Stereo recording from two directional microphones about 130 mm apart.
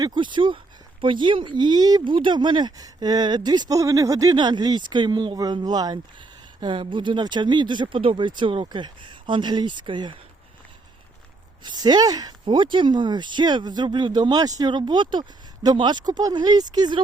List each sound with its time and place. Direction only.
0.0 s speech: 35° right (ahead or behind)
11.6 s speech: 30° right (ahead or behind)